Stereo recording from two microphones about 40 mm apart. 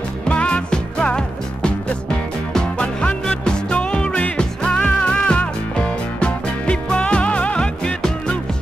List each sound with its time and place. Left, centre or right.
0.3 s music: left
4.8 s music: left